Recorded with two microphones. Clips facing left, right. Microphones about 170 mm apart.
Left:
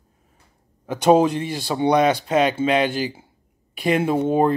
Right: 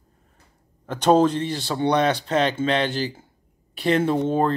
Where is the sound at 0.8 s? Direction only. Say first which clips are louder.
Left 2 dB; 10° left (ahead or behind).